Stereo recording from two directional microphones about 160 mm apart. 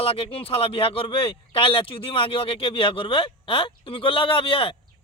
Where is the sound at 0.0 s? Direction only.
35° left (ahead or behind).